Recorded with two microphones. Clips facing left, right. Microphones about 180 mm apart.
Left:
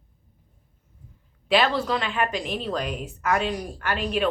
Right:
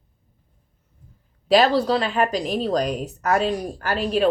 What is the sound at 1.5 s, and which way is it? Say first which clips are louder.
A woman's voice: right 5 dB; 40° right (ahead or behind).